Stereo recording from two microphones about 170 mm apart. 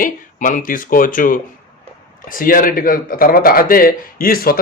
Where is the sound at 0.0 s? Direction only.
50° left (ahead or behind).